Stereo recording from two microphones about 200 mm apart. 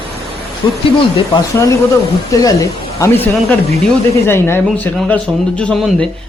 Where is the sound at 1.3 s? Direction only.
15° left (ahead or behind).